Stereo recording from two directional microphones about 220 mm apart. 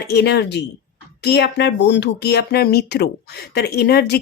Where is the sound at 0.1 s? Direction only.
50° left (ahead or behind).